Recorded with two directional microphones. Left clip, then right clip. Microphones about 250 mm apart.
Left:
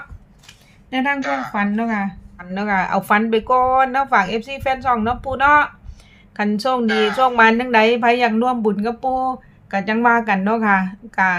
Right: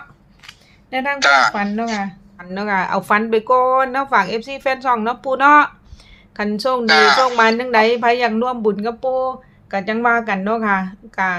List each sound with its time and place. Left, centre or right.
0.9 s speech: centre
1.2 s speech: right
1.5 s a woman's voice: centre
6.8 s speech: right
7.3 s a woman's voice: centre